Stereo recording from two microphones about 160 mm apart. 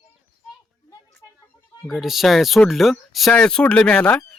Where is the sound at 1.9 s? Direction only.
Centre (ahead or behind).